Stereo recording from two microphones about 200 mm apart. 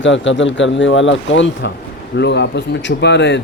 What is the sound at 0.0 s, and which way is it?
Speech, 65° left (ahead or behind).